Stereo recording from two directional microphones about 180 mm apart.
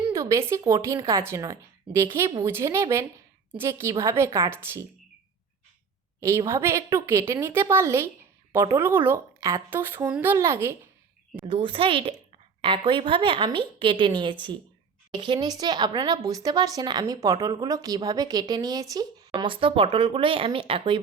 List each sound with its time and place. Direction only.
0.1 s speech: 15° right (ahead or behind)
6.1 s a woman's voice: 15° right (ahead or behind)
11.4 s speech: 30° right (ahead or behind)